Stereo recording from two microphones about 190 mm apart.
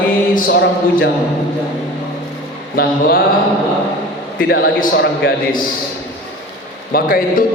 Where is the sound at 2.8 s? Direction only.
50° left (ahead or behind).